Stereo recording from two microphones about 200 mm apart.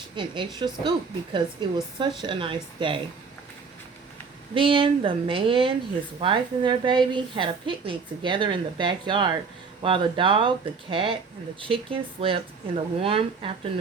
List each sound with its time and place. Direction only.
0.2 s a woman's voice: 20° right (ahead or behind)
4.5 s a woman's voice: 25° right (ahead or behind)